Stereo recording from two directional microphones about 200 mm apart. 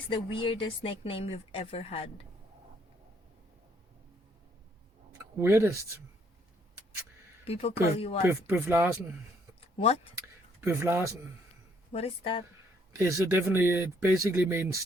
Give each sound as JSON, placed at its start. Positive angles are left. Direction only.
{"t": 0.1, "sound": "a woman's voice", "side_deg": 25}
{"t": 5.1, "sound": "speech", "side_deg": -15}
{"t": 7.4, "sound": "a woman's voice", "side_deg": 30}
{"t": 8.3, "sound": "speech", "side_deg": -10}
{"t": 9.6, "sound": "a sound", "side_deg": 30}
{"t": 10.6, "sound": "speech", "side_deg": -10}
{"t": 11.9, "sound": "a woman's voice", "side_deg": 30}
{"t": 12.9, "sound": "speech", "side_deg": -15}